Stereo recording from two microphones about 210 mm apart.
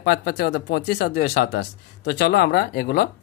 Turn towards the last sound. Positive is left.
turn(degrees=45)  # may be behind; listen again after turning